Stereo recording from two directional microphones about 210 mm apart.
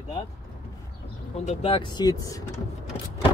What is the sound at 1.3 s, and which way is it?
Speech, 30° left (ahead or behind).